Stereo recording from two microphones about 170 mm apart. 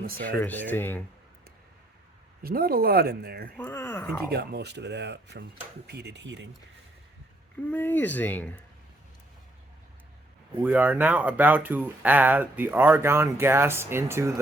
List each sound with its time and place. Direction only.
0.0 s speech: 60° right (ahead or behind)
0.3 s speech: 10° left (ahead or behind)
2.4 s speech: 60° right (ahead or behind)
3.6 s speech: 15° left (ahead or behind)
4.3 s speech: 75° right (ahead or behind); by 5.5 s 90° right
5.9 s speech: 75° right (ahead or behind); by 6.5 s 90° right
7.7 s speech: 10° left (ahead or behind)
10.5 s speech: 10° right (ahead or behind)